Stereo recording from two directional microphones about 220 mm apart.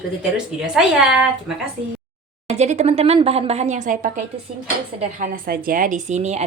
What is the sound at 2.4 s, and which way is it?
A woman's voice, 30° right (ahead or behind).